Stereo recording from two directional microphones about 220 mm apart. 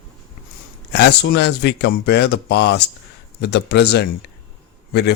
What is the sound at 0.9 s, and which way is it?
Speech, 50° left (ahead or behind).